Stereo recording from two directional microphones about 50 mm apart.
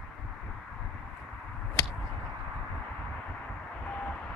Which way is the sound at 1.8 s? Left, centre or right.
Left.